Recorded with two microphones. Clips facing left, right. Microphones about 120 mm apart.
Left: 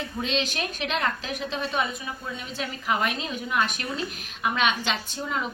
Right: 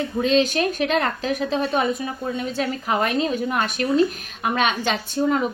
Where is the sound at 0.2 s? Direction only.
45° right (ahead or behind).